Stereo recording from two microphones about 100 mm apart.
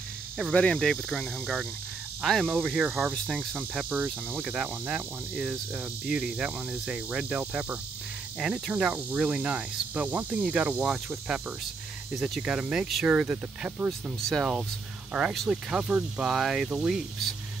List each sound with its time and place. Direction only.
0.4 s speech: 10° left (ahead or behind)
2.4 s speech: 15° right (ahead or behind); by 3.4 s centre (ahead or behind)
3.9 s speech: 15° right (ahead or behind)
12.1 s speech: 5° right (ahead or behind)